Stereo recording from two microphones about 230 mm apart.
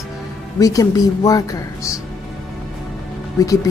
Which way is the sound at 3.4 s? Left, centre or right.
Centre.